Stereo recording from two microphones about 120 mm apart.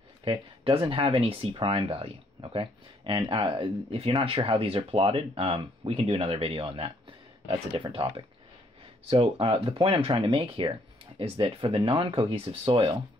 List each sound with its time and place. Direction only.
0.2 s speech: 50° right (ahead or behind)
9.1 s speech: 50° right (ahead or behind)